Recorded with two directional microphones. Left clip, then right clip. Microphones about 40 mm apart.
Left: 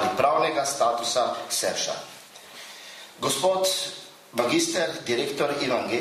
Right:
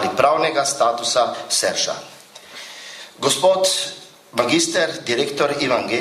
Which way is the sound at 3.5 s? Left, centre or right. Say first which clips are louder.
Right 6 dB; right.